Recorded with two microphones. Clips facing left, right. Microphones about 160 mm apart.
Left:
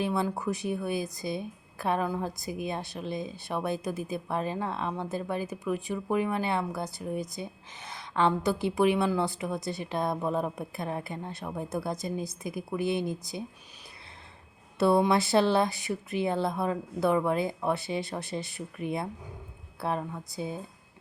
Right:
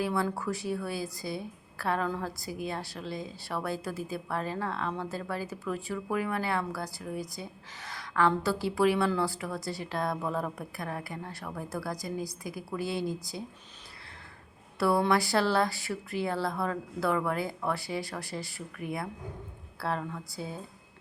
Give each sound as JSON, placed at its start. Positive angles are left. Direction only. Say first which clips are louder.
{"t": 0.0, "sound": "speech", "louder": "left 1 dB", "side_deg": 20}
{"t": 14.8, "sound": "speech", "louder": "left 3 dB", "side_deg": 20}